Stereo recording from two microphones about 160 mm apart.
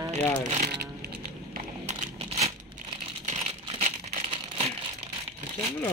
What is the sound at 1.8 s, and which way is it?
Crumpling, 40° right (ahead or behind).